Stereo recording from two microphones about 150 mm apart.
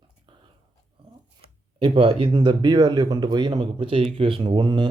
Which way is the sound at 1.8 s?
35° right (ahead or behind).